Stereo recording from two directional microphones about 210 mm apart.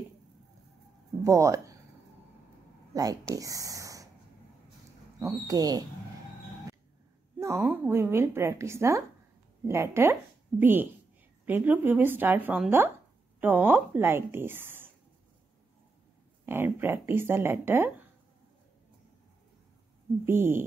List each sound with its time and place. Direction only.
1.2 s speech: 15° right (ahead or behind)
2.9 s speech: 15° right (ahead or behind)
5.2 s a woman's voice: 15° right (ahead or behind)
7.3 s a woman's voice: 15° right (ahead or behind)
16.4 s a woman's voice: 10° right (ahead or behind)
20.2 s a woman's voice: 10° right (ahead or behind)